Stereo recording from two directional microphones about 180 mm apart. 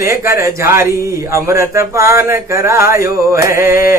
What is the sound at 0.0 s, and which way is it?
Speech, 15° right (ahead or behind).